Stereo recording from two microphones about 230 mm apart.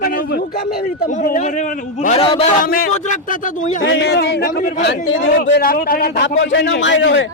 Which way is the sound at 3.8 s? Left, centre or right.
Left.